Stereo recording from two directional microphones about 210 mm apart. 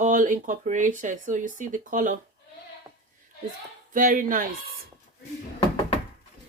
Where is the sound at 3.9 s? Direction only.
40° right (ahead or behind).